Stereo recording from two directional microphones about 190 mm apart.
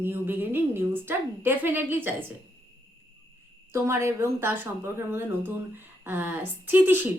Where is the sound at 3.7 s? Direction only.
15° right (ahead or behind).